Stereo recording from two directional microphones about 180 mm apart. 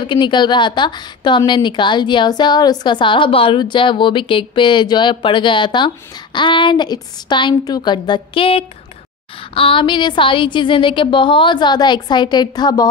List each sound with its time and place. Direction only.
0.0 s a woman's voice: 25° left (ahead or behind)